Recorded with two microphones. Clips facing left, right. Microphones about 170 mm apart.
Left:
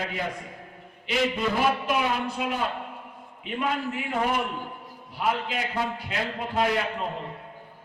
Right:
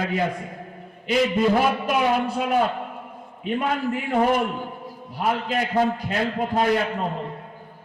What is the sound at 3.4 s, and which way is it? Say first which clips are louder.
A man's voice: right 4 dB; 40° right (ahead or behind).